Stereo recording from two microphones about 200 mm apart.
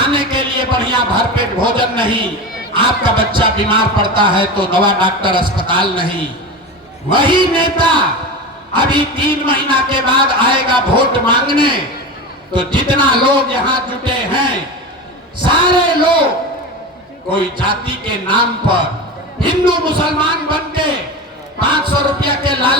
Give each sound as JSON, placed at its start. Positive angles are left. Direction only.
{"t": 0.0, "sound": "a sound", "side_deg": -25}
{"t": 2.7, "sound": "speech", "side_deg": -25}
{"t": 7.1, "sound": "speech", "side_deg": -25}
{"t": 17.3, "sound": "speech", "side_deg": -25}